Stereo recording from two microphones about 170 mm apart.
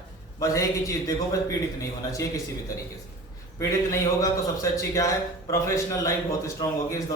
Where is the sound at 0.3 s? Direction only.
20° left (ahead or behind).